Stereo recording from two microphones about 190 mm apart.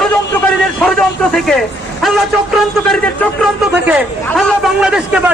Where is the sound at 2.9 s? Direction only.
5° left (ahead or behind).